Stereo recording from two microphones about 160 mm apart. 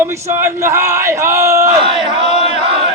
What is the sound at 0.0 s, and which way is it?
Speech, 15° right (ahead or behind).